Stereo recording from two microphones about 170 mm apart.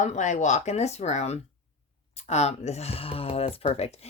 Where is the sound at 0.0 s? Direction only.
45° left (ahead or behind).